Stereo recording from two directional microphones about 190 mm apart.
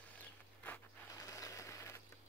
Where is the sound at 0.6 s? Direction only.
10° left (ahead or behind).